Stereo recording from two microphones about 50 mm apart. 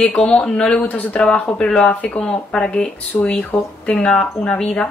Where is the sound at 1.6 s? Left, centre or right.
Centre.